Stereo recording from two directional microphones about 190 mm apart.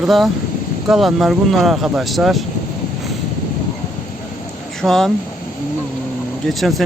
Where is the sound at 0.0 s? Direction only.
Centre (ahead or behind).